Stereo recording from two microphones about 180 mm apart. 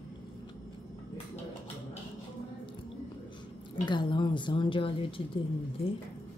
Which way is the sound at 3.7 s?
25° left (ahead or behind).